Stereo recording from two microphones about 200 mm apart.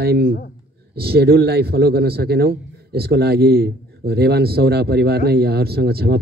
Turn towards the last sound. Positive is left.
turn(degrees=-50)  # may be behind; listen again after turning